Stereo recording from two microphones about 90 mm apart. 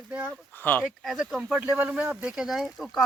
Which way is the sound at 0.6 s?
20° left (ahead or behind).